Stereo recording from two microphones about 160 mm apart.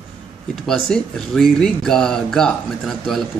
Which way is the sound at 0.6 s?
Centre (ahead or behind).